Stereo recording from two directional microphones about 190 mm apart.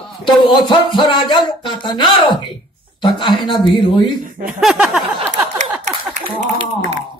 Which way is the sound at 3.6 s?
25° left (ahead or behind).